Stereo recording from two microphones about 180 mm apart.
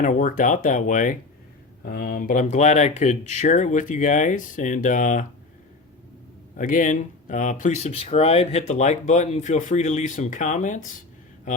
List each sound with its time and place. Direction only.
0.0 s speech: 45° left (ahead or behind)
6.6 s speech: 45° left (ahead or behind)